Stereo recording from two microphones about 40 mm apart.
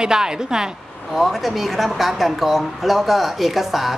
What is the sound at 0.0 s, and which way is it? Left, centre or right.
Speech, centre.